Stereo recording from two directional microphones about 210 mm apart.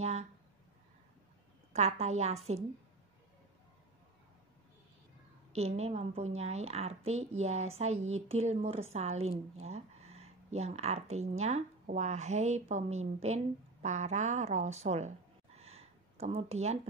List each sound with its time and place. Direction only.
0.0 s a sound: 30° right (ahead or behind)
1.7 s a woman's voice: 30° right (ahead or behind)
5.5 s a woman's voice: 30° right (ahead or behind)